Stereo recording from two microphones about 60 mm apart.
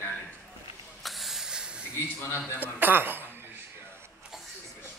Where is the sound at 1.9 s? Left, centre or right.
Left.